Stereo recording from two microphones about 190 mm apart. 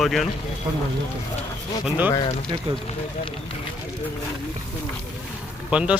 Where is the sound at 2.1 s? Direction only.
25° left (ahead or behind).